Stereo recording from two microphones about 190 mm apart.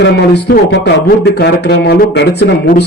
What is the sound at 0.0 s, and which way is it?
Speech, 65° left (ahead or behind).